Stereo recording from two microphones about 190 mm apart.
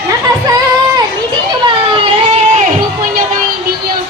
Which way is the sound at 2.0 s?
35° right (ahead or behind).